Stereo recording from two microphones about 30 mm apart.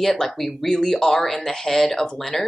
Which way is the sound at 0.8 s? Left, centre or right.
Centre.